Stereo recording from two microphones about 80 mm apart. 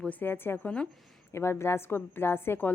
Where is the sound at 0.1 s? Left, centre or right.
Left.